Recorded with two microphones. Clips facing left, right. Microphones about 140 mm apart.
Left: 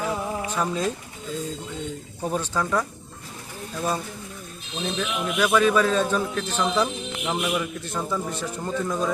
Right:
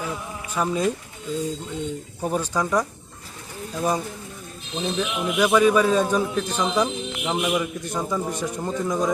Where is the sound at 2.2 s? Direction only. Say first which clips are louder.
Right 2 dB; 10° right (ahead or behind).